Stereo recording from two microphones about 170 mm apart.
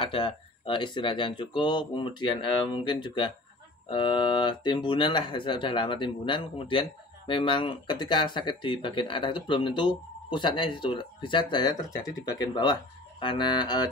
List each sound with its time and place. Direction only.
0.0 s speech: 30° left (ahead or behind)